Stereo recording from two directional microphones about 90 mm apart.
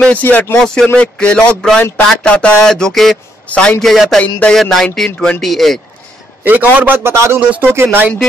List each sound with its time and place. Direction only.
0.0 s speech: 15° left (ahead or behind); by 3.2 s centre (ahead or behind)
3.4 s a man's voice: 10° left (ahead or behind)
3.8 s speech: centre (ahead or behind)
6.4 s a man's voice: 20° right (ahead or behind)